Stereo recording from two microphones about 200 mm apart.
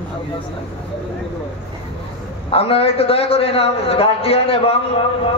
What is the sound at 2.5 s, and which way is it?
A man's voice, 30° left (ahead or behind).